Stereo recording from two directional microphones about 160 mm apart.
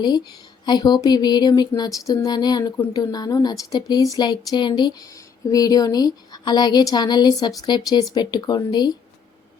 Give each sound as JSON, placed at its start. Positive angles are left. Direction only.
{"t": 0.6, "sound": "a woman's voice", "side_deg": 25}